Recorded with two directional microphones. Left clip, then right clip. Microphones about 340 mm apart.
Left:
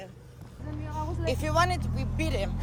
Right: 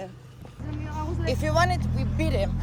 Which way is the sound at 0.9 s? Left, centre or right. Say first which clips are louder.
Right 1 dB; centre.